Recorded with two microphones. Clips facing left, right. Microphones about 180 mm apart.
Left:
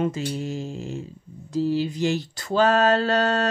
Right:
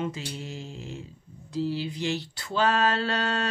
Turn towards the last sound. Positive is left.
turn(degrees=45)  # may be behind; listen again after turning